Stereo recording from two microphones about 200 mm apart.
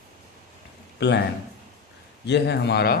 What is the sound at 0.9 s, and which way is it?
Speech, 60° left (ahead or behind).